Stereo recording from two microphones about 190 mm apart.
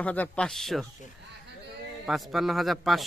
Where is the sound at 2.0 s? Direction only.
Centre (ahead or behind).